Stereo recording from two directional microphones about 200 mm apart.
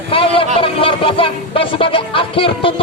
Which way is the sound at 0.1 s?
25° left (ahead or behind).